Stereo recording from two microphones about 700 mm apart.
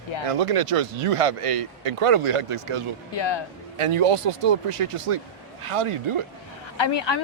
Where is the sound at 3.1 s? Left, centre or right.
Left.